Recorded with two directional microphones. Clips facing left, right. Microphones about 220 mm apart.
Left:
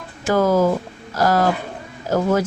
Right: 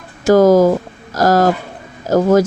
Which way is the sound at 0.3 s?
40° right (ahead or behind).